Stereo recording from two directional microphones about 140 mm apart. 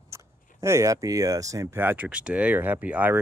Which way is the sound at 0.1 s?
20° right (ahead or behind).